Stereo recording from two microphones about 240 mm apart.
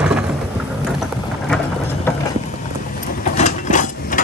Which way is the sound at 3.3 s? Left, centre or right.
Left.